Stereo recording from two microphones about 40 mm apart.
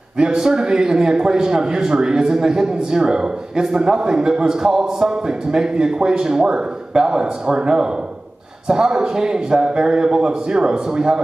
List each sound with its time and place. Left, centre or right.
0.2 s speech: centre